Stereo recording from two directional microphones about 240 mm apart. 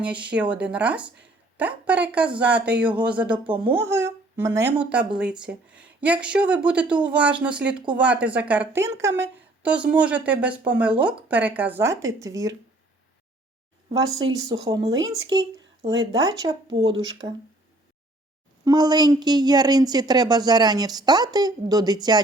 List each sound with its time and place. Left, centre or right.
0.0 s a woman's voice: centre
13.9 s a woman's voice: centre
18.6 s a woman's voice: centre